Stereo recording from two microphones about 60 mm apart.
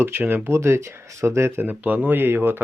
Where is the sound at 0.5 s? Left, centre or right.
Right.